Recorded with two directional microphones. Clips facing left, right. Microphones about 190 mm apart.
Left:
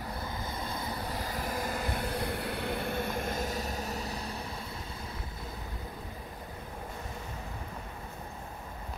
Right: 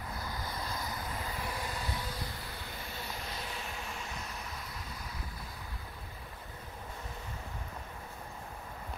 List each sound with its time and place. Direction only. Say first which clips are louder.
0.2 s vehicle: left 3 dB; 25° left (ahead or behind)